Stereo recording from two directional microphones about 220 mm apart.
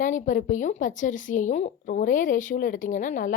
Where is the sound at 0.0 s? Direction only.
35° left (ahead or behind).